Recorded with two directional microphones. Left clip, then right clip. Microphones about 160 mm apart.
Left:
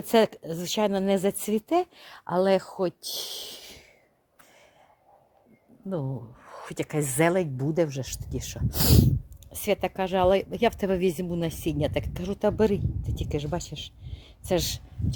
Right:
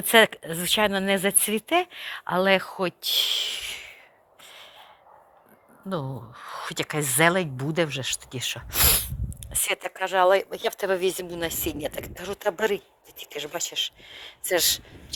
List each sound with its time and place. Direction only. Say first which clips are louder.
0.1 s speech: right 4 dB; 30° left (ahead or behind)
6.0 s speech: right 1 dB; centre (ahead or behind)
6.3 s speech: right 6 dB; 35° left (ahead or behind); by 14.8 s 10° left (ahead or behind)